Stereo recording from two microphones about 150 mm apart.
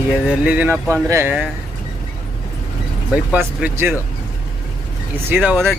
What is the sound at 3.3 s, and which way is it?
Speech, 15° right (ahead or behind).